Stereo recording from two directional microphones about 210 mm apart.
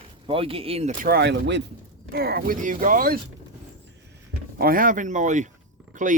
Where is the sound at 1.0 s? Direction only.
50° right (ahead or behind).